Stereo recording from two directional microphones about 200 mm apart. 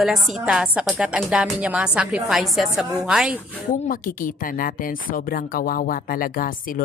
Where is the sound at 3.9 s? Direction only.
45° left (ahead or behind).